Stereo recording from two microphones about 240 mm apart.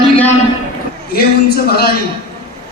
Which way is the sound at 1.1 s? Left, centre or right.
Left.